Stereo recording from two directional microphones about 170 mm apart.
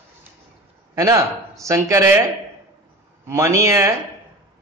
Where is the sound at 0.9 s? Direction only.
20° right (ahead or behind).